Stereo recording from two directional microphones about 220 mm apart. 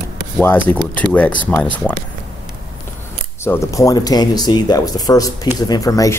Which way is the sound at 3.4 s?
10° left (ahead or behind).